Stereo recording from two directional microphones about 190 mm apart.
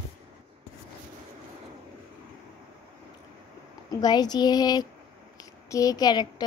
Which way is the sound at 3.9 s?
20° left (ahead or behind).